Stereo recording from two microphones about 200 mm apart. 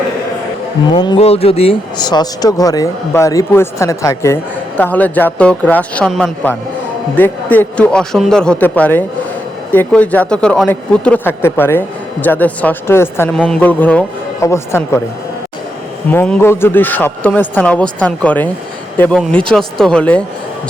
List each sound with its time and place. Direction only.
0.9 s speech: 25° left (ahead or behind)
16.1 s speech: 10° left (ahead or behind)